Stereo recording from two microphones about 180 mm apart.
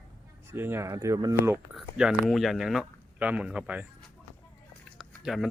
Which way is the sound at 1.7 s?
5° right (ahead or behind).